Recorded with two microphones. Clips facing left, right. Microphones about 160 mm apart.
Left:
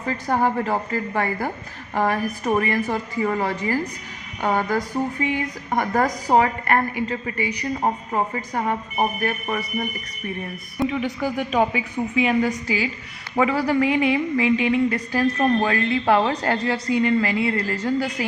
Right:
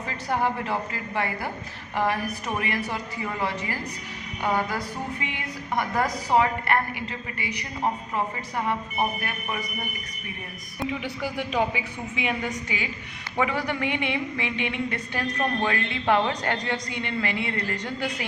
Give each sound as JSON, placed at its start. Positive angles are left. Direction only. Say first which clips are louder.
{"t": 0.3, "sound": "a woman's voice", "louder": "left 4 dB", "side_deg": 45}
{"t": 8.1, "sound": "a woman's voice", "louder": "left 4 dB", "side_deg": 45}
{"t": 11.0, "sound": "a woman's voice", "louder": "left 6 dB", "side_deg": 45}